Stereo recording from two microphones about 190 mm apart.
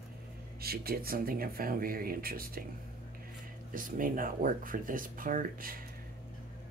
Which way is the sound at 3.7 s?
45° right (ahead or behind).